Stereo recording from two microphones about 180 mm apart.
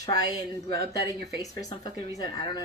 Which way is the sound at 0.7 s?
60° right (ahead or behind).